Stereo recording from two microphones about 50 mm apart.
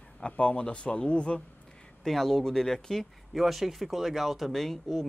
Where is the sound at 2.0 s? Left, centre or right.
Centre.